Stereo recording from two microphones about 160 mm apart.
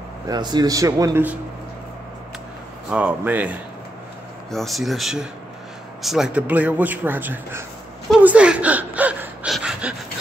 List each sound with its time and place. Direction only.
0.3 s speech: 25° right (ahead or behind)
2.9 s speech: 10° right (ahead or behind)
4.5 s speech: centre (ahead or behind)
8.2 s a sound: 10° right (ahead or behind)